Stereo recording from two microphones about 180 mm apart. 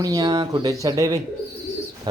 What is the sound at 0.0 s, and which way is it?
Speech, 20° right (ahead or behind).